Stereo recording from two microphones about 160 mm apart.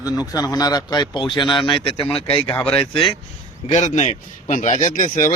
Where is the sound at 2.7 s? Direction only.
5° left (ahead or behind).